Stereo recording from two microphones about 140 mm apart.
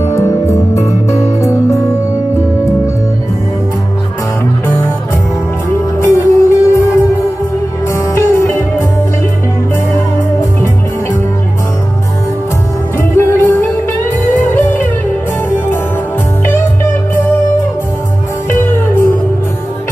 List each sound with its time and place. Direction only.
0.1 s music: 20° left (ahead or behind)
4.6 s music: 15° left (ahead or behind)
5.9 s music: 20° left (ahead or behind)
7.9 s music: 20° left (ahead or behind)
13.1 s music: 15° left (ahead or behind)
18.5 s music: 15° left (ahead or behind)